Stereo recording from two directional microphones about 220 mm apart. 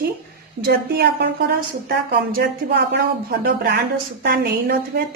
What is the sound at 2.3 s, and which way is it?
Speech, 45° right (ahead or behind).